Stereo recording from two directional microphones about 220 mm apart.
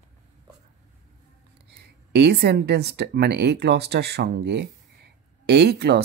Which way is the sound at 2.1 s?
45° right (ahead or behind).